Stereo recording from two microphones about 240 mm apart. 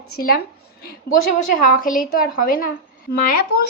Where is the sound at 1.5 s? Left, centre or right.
Left.